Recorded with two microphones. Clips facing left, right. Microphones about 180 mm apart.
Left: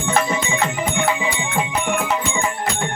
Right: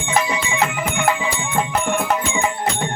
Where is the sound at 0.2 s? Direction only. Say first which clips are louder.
Right 1 dB; 45° left (ahead or behind).